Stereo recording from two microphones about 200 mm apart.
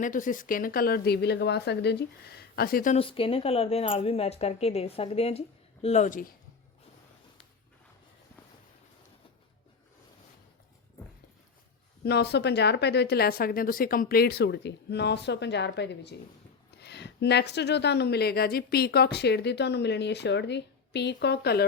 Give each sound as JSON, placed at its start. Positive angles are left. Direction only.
{"t": 0.0, "sound": "a woman's voice", "side_deg": 40}
{"t": 3.0, "sound": "speech", "side_deg": 25}
{"t": 12.0, "sound": "speech", "side_deg": 55}